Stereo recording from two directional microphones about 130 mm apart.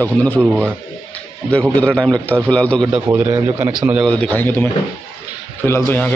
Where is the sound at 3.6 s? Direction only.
10° right (ahead or behind).